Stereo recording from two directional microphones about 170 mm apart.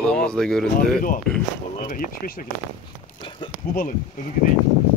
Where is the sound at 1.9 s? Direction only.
55° left (ahead or behind).